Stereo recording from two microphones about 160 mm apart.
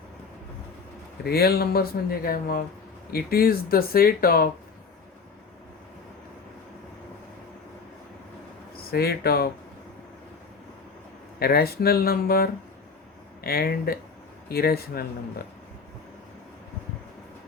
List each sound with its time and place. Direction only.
1.2 s speech: 75° left (ahead or behind)
8.9 s speech: 80° left
11.3 s speech: 75° left (ahead or behind)